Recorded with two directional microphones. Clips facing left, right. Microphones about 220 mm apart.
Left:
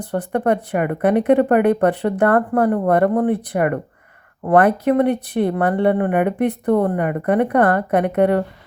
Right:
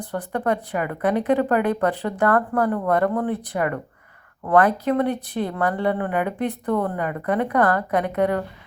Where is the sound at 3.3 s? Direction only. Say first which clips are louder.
Left 5 dB; 55° left (ahead or behind).